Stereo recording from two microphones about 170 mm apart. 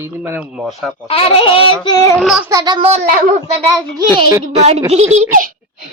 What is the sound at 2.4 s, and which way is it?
Speech, 20° right (ahead or behind).